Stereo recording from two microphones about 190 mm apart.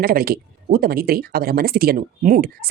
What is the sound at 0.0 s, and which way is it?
Speech, 50° right (ahead or behind).